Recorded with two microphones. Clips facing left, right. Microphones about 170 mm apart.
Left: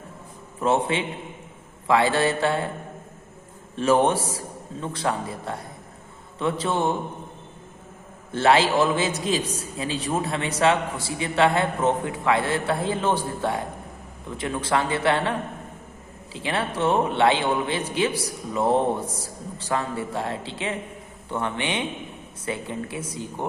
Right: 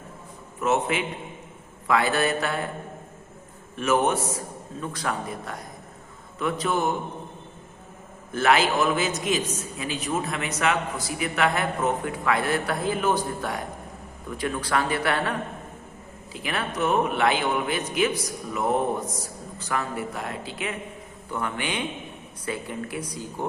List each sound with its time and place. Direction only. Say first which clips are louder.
0.6 s a man's voice: left 2 dB; 30° left (ahead or behind)
3.8 s a man's voice: left 3 dB; 30° left (ahead or behind)
8.3 s a man's voice: left 2 dB; 30° left (ahead or behind)